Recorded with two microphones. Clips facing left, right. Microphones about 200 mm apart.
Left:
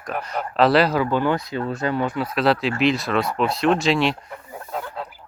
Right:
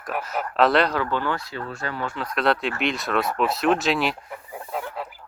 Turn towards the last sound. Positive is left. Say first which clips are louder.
# left 3 dB
turn(degrees=0)  # may be behind; listen again after turning